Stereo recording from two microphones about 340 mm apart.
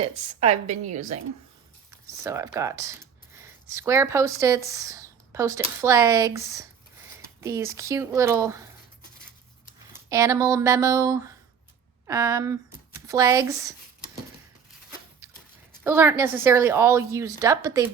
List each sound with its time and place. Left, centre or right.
0.0 s a woman's voice: centre
2.2 s a woman's voice: centre
10.1 s a woman's voice: centre
15.8 s a woman's voice: centre